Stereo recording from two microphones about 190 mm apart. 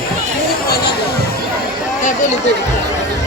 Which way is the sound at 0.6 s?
55° left (ahead or behind).